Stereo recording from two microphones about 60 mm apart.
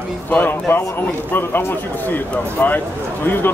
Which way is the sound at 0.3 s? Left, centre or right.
Left.